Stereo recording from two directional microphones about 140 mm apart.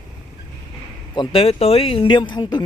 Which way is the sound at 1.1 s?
40° left (ahead or behind).